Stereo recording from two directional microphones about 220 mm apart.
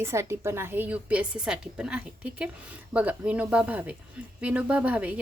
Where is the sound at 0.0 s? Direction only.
10° right (ahead or behind).